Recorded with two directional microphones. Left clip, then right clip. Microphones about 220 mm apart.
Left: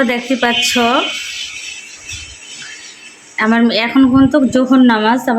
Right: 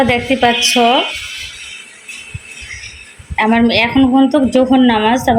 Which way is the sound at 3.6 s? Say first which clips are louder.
Right 2 dB; 35° left (ahead or behind).